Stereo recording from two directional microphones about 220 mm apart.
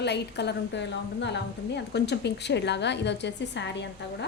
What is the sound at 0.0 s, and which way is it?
A woman's voice, 50° left (ahead or behind).